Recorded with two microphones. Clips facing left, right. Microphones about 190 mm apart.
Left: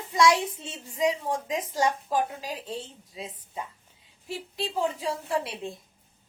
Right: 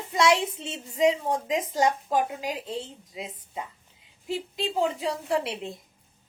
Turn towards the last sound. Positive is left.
turn(degrees=-25)  # may be behind; listen again after turning